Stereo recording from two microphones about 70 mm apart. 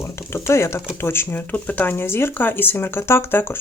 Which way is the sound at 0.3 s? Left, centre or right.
Left.